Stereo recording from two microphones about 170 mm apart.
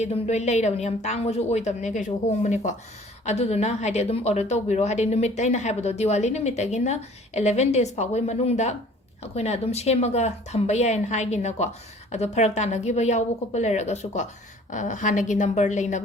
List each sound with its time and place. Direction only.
0.0 s a woman's voice: 40° left (ahead or behind)